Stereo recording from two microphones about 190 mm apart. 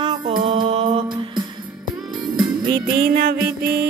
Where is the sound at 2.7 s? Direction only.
50° right (ahead or behind).